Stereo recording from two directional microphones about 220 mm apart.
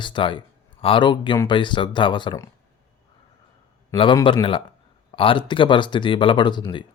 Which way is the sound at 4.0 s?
20° left (ahead or behind).